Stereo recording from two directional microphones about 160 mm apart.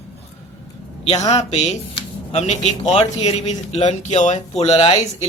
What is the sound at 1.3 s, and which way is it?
Speech, 40° left (ahead or behind).